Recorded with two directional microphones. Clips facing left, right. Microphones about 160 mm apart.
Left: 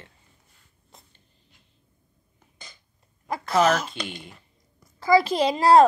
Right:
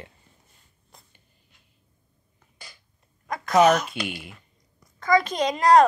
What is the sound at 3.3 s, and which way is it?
Speech, 30° left (ahead or behind).